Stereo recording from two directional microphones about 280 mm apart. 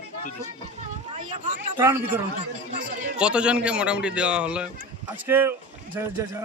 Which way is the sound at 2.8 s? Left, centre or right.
Right.